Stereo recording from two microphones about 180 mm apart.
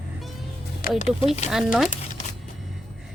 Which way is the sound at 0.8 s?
55° left (ahead or behind).